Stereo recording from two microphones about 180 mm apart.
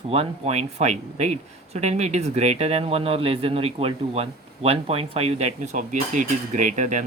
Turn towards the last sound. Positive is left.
turn(degrees=-45)  # may be behind; listen again after turning